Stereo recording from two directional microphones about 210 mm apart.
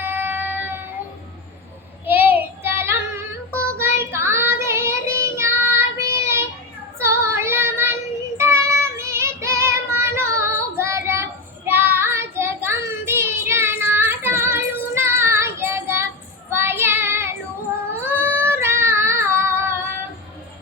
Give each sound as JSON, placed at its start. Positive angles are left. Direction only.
{"t": 0.0, "sound": "child singing", "side_deg": -10}
{"t": 2.0, "sound": "child singing", "side_deg": -10}
{"t": 2.7, "sound": "female singing", "side_deg": -10}
{"t": 3.8, "sound": "child singing", "side_deg": -10}
{"t": 7.0, "sound": "female singing", "side_deg": -15}
{"t": 8.4, "sound": "child singing", "side_deg": -15}